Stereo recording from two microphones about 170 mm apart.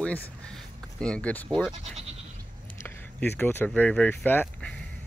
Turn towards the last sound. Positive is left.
turn(degrees=10)  # may be behind; listen again after turning